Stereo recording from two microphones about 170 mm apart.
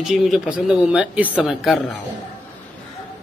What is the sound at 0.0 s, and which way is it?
Speech, centre (ahead or behind).